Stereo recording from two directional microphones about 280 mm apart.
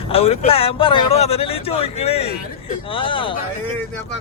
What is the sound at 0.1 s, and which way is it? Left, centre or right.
Speech, left.